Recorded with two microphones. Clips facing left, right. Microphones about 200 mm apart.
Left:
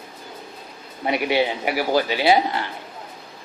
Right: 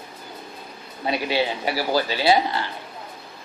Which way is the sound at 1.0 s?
20° left (ahead or behind).